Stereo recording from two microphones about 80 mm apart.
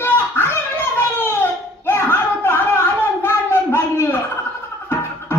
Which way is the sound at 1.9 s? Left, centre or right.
Left.